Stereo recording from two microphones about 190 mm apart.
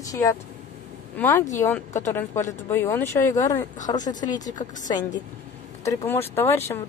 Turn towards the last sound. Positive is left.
turn(degrees=15)  # may be behind; listen again after turning